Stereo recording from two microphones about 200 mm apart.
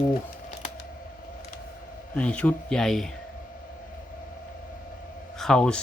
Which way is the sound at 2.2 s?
5° left (ahead or behind).